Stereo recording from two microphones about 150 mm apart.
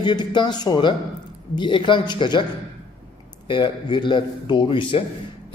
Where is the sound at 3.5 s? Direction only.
30° left (ahead or behind).